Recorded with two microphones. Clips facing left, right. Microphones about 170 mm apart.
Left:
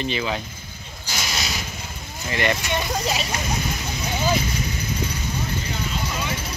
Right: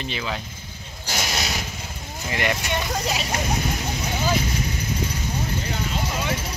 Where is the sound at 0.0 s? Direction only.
Centre (ahead or behind).